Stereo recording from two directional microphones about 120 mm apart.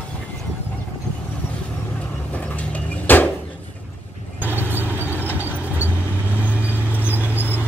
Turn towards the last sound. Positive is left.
turn(degrees=-15)  # may be behind; listen again after turning